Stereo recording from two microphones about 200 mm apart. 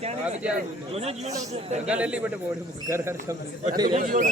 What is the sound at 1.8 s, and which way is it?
A man's voice, 5° right (ahead or behind).